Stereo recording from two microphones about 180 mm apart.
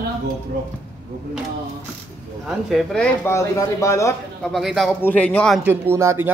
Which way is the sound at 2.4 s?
Centre (ahead or behind).